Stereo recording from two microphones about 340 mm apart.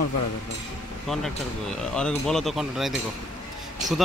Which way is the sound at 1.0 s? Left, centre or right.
Centre.